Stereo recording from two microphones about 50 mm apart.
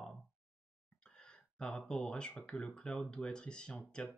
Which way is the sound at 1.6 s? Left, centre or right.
Centre.